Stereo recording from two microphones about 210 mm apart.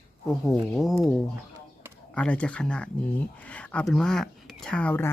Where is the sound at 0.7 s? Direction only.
Centre (ahead or behind).